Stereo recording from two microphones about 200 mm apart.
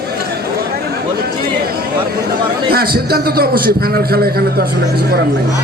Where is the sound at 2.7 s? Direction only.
50° right (ahead or behind).